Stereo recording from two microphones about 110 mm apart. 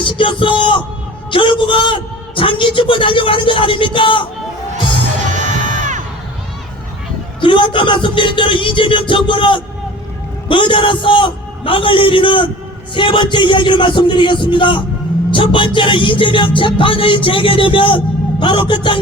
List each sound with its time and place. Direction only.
0.0 s speech: 50° left (ahead or behind)
7.4 s speech: 50° left (ahead or behind)